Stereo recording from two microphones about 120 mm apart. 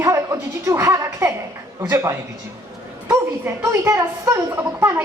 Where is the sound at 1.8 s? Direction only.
25° right (ahead or behind).